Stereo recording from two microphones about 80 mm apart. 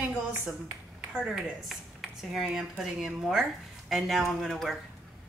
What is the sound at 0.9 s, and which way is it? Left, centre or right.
Speech, centre.